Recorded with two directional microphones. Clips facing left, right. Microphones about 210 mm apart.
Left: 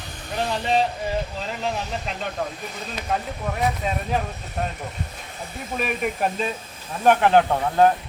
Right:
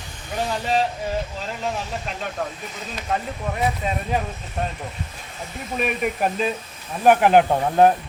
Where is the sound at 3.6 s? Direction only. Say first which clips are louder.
Even; centre (ahead or behind).